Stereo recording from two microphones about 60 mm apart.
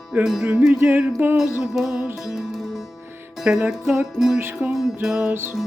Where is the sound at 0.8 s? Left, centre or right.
Right.